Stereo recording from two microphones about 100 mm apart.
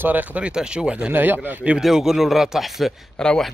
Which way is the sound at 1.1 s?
20° right (ahead or behind).